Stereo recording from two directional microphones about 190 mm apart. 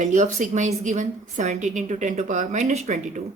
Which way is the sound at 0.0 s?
40° right (ahead or behind).